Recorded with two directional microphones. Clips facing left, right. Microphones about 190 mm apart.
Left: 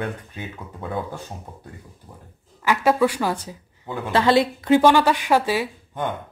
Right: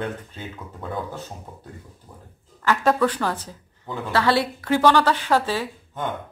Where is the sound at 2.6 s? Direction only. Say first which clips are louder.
Left 1 dB; 10° left (ahead or behind).